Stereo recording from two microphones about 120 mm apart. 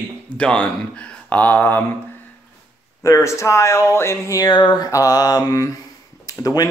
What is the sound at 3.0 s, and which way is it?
A man's voice, 25° left (ahead or behind).